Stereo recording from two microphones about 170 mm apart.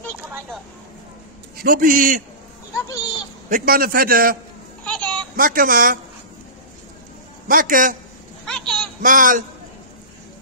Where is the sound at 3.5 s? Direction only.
60° right (ahead or behind).